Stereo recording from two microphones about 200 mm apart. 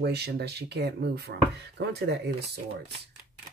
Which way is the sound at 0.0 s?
55° right (ahead or behind).